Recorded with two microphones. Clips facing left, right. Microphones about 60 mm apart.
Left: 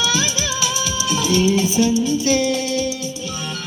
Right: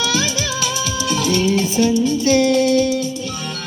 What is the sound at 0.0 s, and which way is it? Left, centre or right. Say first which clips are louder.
Music: right 1 dB; right.